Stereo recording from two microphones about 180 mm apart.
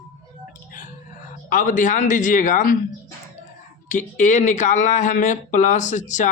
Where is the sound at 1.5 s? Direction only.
45° left (ahead or behind).